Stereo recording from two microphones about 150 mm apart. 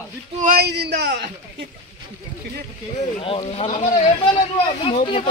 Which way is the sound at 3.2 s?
35° left (ahead or behind).